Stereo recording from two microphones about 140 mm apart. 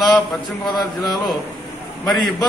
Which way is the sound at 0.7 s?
30° left (ahead or behind).